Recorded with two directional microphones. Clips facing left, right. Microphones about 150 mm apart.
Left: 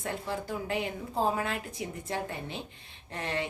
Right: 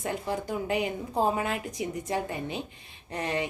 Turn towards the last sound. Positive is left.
turn(degrees=-15)  # may be behind; listen again after turning